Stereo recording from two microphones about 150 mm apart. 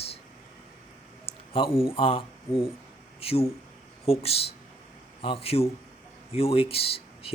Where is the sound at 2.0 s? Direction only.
40° left (ahead or behind).